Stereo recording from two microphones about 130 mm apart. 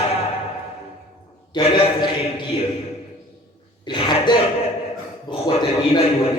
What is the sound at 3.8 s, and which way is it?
A man's voice, 35° left (ahead or behind).